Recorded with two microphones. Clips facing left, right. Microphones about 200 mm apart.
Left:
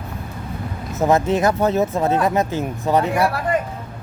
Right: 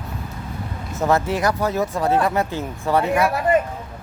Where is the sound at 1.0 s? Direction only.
20° left (ahead or behind).